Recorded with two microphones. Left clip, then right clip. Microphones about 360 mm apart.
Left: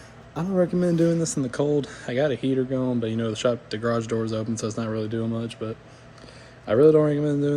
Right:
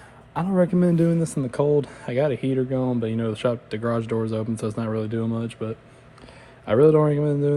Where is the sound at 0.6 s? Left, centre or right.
Right.